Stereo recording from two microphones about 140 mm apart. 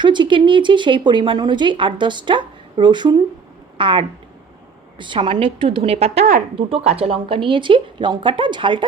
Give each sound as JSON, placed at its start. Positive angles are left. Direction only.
{"t": 0.0, "sound": "speech", "side_deg": -35}